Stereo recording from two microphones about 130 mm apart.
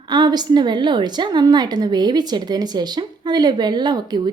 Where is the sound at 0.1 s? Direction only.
35° right (ahead or behind).